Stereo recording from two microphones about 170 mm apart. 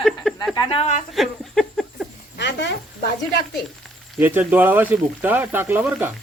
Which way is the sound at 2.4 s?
90° left.